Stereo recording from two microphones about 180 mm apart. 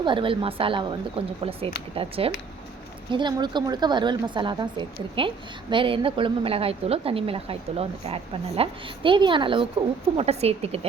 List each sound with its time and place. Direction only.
0.0 s a woman's voice: 30° right (ahead or behind)